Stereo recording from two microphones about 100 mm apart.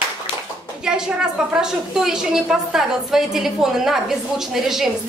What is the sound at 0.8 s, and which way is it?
A woman's voice, 5° right (ahead or behind).